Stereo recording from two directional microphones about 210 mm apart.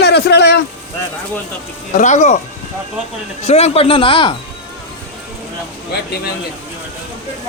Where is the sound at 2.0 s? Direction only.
35° left (ahead or behind).